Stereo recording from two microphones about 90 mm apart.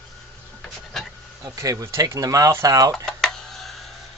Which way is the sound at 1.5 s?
40° right (ahead or behind).